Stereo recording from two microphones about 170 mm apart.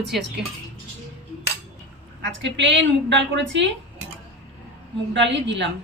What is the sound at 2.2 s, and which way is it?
Speech, 90° right.